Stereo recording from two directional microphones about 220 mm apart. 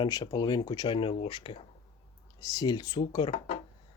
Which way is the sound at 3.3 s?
35° left (ahead or behind).